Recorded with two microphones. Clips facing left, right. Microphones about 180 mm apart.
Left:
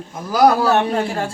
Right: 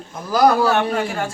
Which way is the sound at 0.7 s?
35° left (ahead or behind).